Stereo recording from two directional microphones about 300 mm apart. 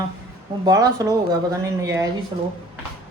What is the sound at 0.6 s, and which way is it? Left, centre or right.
Speech, centre.